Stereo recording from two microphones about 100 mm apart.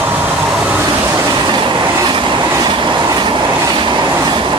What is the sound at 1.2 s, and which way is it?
Train, 40° right (ahead or behind).